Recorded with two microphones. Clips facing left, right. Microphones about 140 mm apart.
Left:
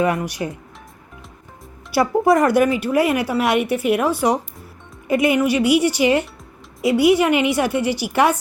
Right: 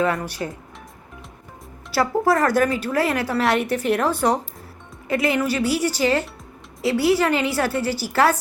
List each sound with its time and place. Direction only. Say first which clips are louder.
0.0 s a woman's voice: left 2 dB; 15° left (ahead or behind)
1.9 s a woman's voice: left 3 dB; 15° left (ahead or behind)